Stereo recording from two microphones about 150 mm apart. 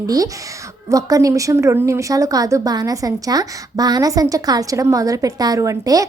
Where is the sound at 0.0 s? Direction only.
25° right (ahead or behind).